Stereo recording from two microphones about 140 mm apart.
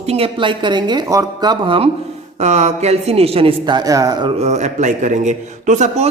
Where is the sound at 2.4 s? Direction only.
50° right (ahead or behind); by 4.3 s 25° right (ahead or behind).